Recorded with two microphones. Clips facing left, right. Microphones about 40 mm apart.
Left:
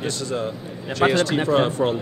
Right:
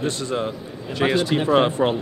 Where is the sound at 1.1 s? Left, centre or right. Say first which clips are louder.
Right 1 dB; centre.